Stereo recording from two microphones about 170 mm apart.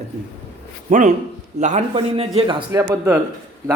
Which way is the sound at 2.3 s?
30° right (ahead or behind).